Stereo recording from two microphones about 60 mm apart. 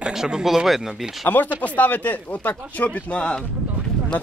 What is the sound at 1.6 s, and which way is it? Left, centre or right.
Speech, left.